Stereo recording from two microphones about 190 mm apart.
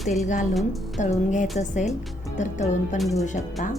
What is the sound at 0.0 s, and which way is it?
Speech, centre (ahead or behind).